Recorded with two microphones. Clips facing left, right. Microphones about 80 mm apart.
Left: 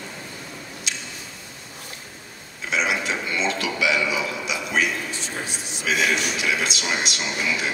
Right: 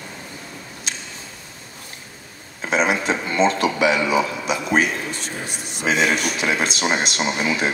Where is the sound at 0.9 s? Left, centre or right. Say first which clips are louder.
Right 1 dB; right.